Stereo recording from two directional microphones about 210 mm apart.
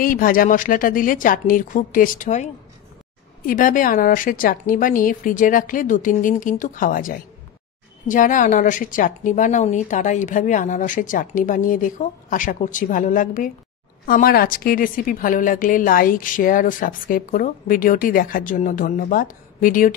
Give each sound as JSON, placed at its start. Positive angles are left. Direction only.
{"t": 0.0, "sound": "a woman's voice", "side_deg": 40}